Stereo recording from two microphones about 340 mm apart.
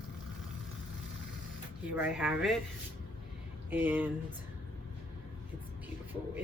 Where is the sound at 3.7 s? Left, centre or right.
Centre.